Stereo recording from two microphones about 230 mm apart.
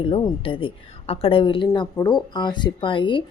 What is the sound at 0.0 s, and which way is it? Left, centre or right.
A woman's voice, left.